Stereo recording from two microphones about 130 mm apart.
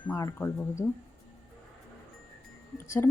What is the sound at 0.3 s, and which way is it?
Speech, 15° left (ahead or behind).